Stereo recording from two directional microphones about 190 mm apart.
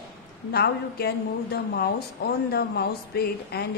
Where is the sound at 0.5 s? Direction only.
55° left (ahead or behind).